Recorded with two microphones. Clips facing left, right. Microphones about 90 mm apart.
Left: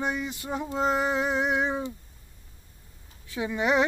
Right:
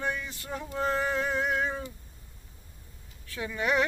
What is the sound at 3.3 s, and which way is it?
Speech, 20° left (ahead or behind).